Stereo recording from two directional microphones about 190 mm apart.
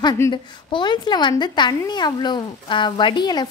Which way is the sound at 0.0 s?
20° left (ahead or behind).